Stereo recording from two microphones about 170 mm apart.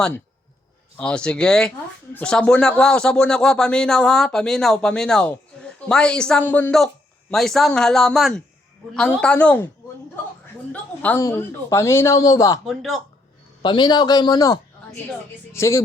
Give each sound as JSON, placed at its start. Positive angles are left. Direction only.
{"t": 0.9, "sound": "speech", "side_deg": 5}
{"t": 10.7, "sound": "speech", "side_deg": 10}
{"t": 12.6, "sound": "speech", "side_deg": 0}
{"t": 13.6, "sound": "a man's voice", "side_deg": 25}